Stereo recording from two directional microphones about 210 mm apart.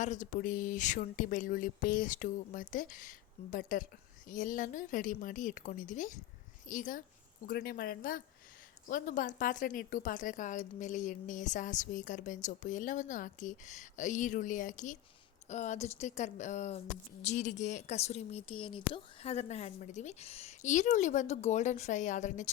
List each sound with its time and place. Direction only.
0.0 s speech: 35° left (ahead or behind)